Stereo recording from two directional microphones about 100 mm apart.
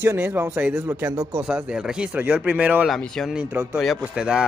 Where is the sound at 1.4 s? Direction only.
10° right (ahead or behind).